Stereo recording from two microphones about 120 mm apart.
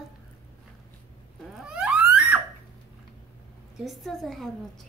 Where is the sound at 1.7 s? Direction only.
10° right (ahead or behind).